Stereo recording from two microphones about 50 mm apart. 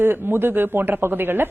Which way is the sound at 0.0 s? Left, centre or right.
Right.